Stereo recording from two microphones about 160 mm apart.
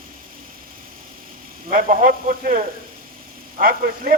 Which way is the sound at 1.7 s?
60° right (ahead or behind).